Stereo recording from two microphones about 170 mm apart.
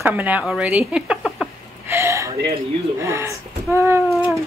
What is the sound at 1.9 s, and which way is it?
Speech, 15° right (ahead or behind).